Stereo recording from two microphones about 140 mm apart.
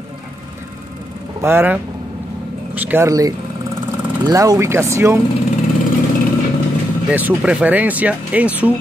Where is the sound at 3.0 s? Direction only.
25° right (ahead or behind).